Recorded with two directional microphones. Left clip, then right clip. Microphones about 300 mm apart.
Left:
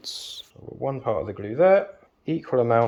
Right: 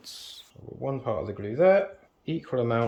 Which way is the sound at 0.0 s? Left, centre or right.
Left.